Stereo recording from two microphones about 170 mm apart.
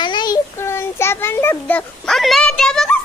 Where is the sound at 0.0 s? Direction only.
25° left (ahead or behind).